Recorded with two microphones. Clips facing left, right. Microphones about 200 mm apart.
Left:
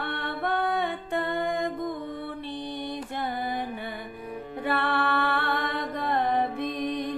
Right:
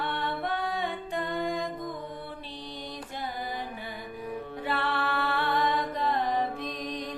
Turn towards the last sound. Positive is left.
turn(degrees=55)  # may be behind; listen again after turning